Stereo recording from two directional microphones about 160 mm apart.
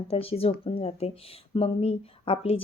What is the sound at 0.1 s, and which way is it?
Speech, 35° left (ahead or behind).